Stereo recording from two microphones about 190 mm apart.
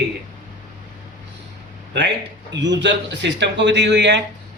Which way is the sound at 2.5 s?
70° right (ahead or behind).